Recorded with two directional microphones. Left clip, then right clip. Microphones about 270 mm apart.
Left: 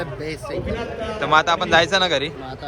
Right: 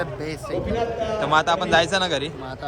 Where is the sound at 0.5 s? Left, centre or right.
Right.